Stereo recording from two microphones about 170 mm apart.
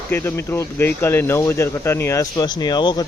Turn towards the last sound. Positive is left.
turn(degrees=25)  # may be behind; listen again after turning